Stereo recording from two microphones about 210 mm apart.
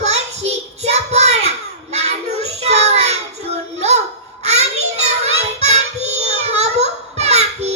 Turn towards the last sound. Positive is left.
turn(degrees=-30)  # may be behind; listen again after turning